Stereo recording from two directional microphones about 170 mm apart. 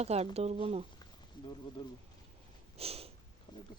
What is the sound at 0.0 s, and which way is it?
Speech, 40° right (ahead or behind).